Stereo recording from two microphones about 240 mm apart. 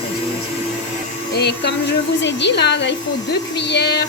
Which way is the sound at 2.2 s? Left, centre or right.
Left.